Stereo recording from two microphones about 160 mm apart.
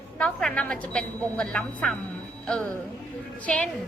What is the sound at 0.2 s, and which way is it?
A woman's voice, 5° left (ahead or behind).